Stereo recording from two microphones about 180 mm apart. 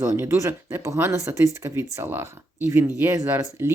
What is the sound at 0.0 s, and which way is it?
Speech, 15° right (ahead or behind).